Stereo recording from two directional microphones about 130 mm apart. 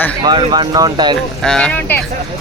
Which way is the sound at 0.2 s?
35° right (ahead or behind).